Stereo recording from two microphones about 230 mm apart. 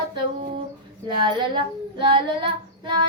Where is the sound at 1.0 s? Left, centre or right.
Centre.